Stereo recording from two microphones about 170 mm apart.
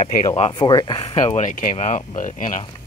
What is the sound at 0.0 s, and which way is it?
Speech, 45° left (ahead or behind).